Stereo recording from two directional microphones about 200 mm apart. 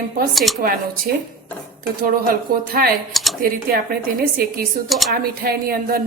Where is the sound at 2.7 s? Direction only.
50° right (ahead or behind).